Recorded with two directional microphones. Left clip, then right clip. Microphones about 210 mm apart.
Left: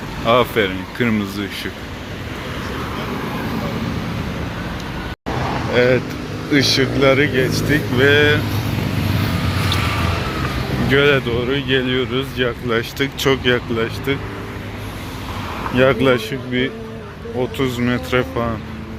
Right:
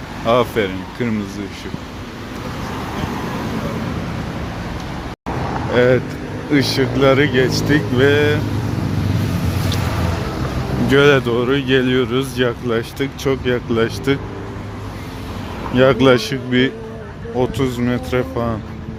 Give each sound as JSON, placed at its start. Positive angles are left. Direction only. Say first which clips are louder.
{"t": 0.3, "sound": "speech", "louder": "left 1 dB", "side_deg": -5}
{"t": 5.7, "sound": "speech", "louder": "right 1 dB", "side_deg": -15}
{"t": 10.8, "sound": "speech", "louder": "right 2 dB", "side_deg": -20}
{"t": 13.7, "sound": "speech", "louder": "right 3 dB", "side_deg": -20}
{"t": 15.7, "sound": "speech", "louder": "right 2 dB", "side_deg": -15}
{"t": 17.6, "sound": "speech", "louder": "even", "side_deg": -10}